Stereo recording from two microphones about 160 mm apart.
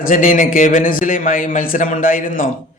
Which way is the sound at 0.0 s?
60° left (ahead or behind).